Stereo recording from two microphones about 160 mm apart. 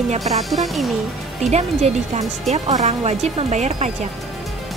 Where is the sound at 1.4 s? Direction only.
45° right (ahead or behind).